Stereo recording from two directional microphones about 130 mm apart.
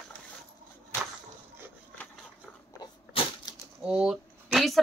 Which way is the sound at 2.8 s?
30° left (ahead or behind).